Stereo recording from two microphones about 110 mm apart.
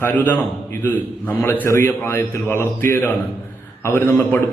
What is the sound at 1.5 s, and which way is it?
A man's voice, 25° left (ahead or behind).